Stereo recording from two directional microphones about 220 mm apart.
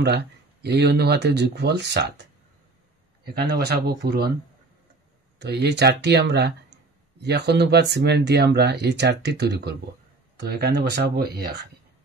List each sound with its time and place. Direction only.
0.0 s speech: 50° right (ahead or behind)
3.3 s speech: 45° right (ahead or behind)
5.4 s speech: 50° right (ahead or behind)